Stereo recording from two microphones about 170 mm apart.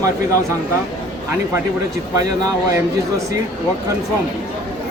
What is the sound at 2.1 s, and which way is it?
Speech, 20° right (ahead or behind).